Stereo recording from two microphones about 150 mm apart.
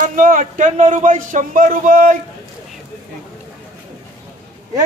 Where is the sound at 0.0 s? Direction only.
60° right (ahead or behind).